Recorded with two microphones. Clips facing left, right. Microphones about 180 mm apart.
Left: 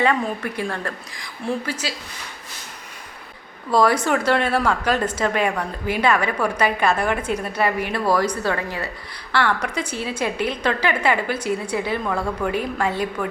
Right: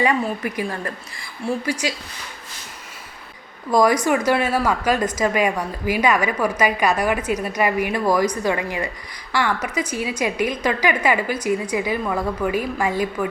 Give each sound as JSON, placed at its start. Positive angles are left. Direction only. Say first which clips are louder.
{"t": 0.0, "sound": "a woman's voice", "louder": "even", "side_deg": -10}
{"t": 3.7, "sound": "a woman's voice", "louder": "right 1 dB", "side_deg": -10}